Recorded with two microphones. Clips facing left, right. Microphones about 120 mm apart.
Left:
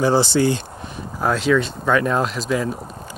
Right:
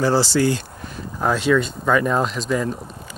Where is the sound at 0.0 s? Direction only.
20° left (ahead or behind).